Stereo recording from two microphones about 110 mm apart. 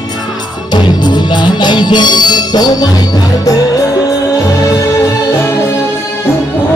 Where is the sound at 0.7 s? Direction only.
40° left (ahead or behind).